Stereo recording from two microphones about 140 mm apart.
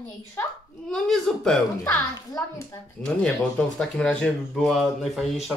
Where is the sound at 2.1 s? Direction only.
25° left (ahead or behind).